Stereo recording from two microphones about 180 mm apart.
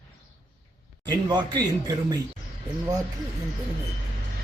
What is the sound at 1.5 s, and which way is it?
Speech, 20° right (ahead or behind).